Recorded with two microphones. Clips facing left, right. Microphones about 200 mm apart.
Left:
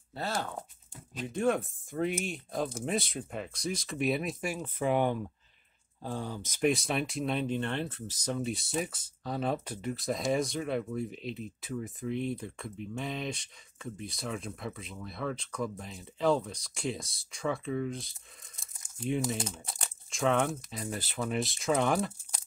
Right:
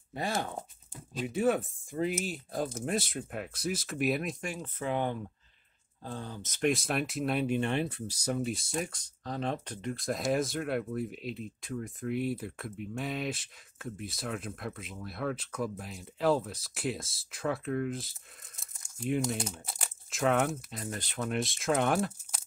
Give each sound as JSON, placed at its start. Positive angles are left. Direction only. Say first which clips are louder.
{"t": 0.1, "sound": "speech", "louder": "right 1 dB", "side_deg": -15}
{"t": 1.2, "sound": "speech", "louder": "right 1 dB", "side_deg": -5}
{"t": 6.7, "sound": "speech", "louder": "even", "side_deg": 0}